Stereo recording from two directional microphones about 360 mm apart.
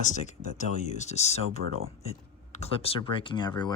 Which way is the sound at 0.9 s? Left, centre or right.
Centre.